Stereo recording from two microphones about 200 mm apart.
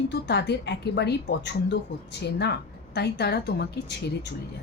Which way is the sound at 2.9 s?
55° left (ahead or behind).